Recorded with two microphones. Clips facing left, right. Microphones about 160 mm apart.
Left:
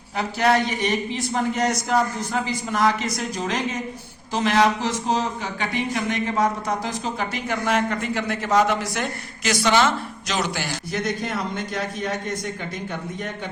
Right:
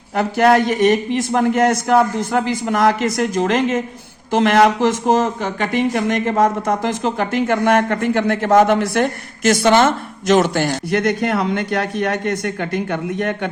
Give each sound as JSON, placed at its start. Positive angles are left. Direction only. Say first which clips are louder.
{"t": 0.2, "sound": "speech", "louder": "right 7 dB", "side_deg": -50}